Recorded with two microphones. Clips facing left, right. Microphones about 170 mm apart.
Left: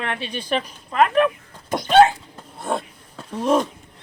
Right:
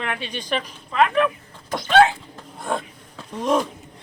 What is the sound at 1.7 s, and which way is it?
Speech, 20° left (ahead or behind).